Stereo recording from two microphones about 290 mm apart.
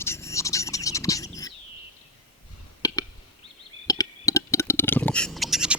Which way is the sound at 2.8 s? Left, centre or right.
Centre.